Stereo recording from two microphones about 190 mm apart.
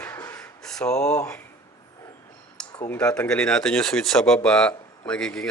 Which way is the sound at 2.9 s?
5° left (ahead or behind).